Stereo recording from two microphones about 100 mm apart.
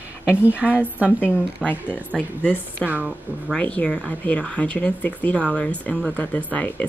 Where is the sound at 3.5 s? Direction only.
10° left (ahead or behind).